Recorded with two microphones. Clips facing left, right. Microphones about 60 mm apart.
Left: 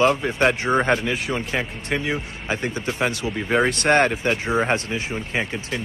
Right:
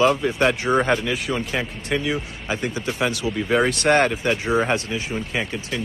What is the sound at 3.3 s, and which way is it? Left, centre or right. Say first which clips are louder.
Speech: right 1 dB; centre.